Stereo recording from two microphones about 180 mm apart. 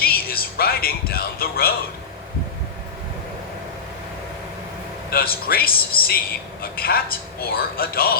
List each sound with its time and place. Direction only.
0.0 s music: 55° left (ahead or behind)
5.1 s speech: 55° left (ahead or behind)